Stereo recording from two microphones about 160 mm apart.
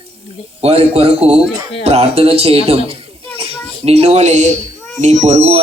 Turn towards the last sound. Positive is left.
turn(degrees=-40)  # may be behind; listen again after turning